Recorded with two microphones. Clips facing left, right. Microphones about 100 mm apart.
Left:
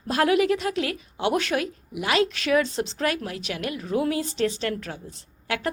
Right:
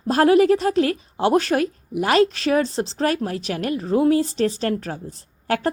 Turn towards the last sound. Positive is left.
turn(degrees=-40)  # may be behind; listen again after turning